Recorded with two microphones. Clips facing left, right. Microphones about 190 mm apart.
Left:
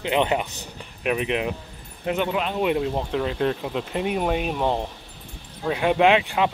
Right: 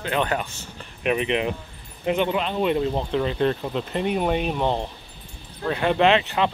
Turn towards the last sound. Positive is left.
turn(degrees=10)  # may be behind; listen again after turning